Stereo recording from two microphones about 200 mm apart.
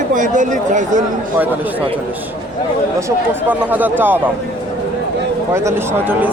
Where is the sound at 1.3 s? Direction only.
10° right (ahead or behind).